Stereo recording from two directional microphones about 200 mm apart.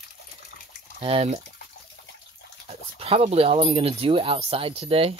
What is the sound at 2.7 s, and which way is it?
Speech, 30° right (ahead or behind).